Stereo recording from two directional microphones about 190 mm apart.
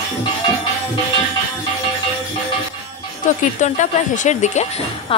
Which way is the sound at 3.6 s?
40° left (ahead or behind).